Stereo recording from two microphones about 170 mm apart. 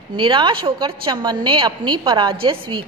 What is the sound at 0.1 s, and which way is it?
A woman's voice, 30° right (ahead or behind).